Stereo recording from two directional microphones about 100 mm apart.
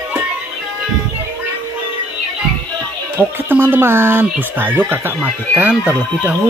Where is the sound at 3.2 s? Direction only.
20° right (ahead or behind).